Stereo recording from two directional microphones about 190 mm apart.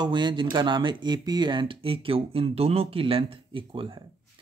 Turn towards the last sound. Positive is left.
turn(degrees=-25)  # may be behind; listen again after turning